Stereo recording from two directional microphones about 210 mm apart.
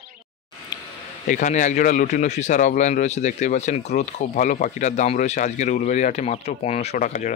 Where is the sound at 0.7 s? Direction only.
20° left (ahead or behind).